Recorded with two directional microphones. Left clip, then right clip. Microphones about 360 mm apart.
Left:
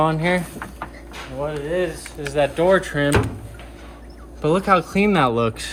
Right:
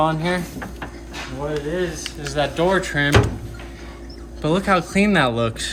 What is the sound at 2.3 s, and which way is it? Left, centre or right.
Speech, centre.